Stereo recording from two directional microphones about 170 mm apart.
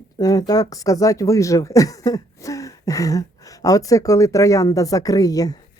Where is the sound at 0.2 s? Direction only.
20° left (ahead or behind).